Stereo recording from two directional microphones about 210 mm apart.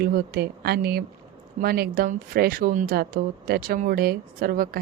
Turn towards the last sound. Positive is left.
turn(degrees=-45)  # may be behind; listen again after turning